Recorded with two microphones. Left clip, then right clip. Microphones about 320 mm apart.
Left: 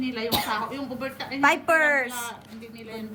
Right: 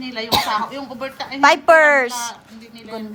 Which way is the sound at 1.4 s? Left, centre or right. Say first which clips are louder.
Right 9 dB; centre.